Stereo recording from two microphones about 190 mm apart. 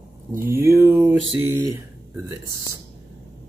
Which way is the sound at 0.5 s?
15° right (ahead or behind).